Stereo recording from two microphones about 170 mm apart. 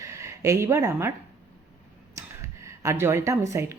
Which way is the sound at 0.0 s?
15° right (ahead or behind).